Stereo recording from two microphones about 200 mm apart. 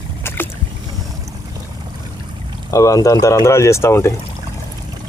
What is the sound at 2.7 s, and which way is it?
Speech, 15° left (ahead or behind).